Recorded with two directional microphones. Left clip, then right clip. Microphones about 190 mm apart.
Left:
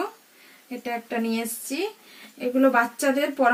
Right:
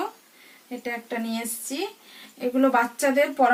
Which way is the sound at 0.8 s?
20° right (ahead or behind).